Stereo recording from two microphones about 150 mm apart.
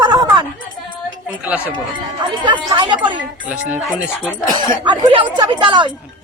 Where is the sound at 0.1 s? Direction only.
30° right (ahead or behind).